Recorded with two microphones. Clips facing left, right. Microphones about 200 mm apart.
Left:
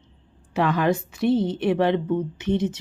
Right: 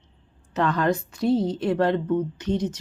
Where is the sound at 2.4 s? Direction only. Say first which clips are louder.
Left 2 dB; 25° left (ahead or behind).